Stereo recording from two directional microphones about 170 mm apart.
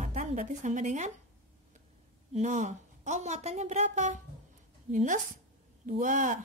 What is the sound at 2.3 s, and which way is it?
Speech, 45° right (ahead or behind).